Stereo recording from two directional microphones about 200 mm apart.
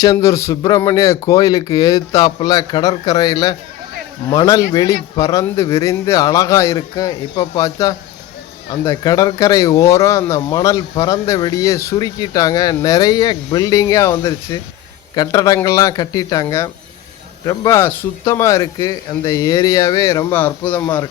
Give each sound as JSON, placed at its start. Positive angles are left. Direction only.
{"t": 0.0, "sound": "speech", "side_deg": 15}